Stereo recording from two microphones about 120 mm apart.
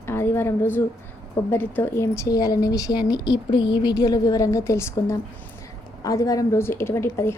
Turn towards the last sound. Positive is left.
turn(degrees=20)  # may be behind; listen again after turning